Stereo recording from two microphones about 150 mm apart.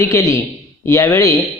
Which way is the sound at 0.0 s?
20° left (ahead or behind).